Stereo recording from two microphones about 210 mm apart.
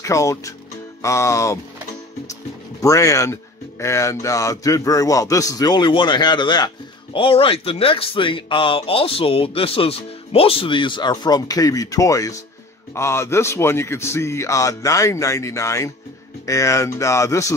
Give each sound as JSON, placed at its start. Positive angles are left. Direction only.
{"t": 0.0, "sound": "a man's voice", "side_deg": 15}
{"t": 2.8, "sound": "a man's voice", "side_deg": 15}